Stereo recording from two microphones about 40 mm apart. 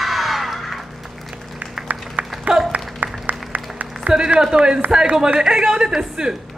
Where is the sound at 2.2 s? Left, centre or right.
Right.